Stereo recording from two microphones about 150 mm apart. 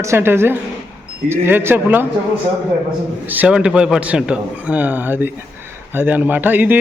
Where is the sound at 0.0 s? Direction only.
15° right (ahead or behind).